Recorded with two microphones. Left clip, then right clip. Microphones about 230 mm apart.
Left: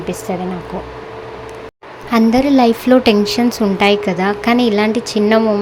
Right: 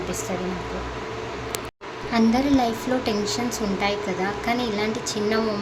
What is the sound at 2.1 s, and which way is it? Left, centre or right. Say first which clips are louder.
A woman's voice: left 9 dB; left.